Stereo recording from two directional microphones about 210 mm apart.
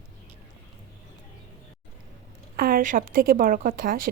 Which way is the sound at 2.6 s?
45° right (ahead or behind).